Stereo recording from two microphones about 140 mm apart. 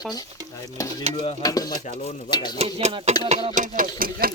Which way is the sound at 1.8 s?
60° left (ahead or behind).